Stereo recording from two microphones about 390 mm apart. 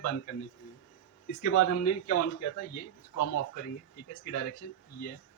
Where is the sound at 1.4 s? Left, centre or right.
Left.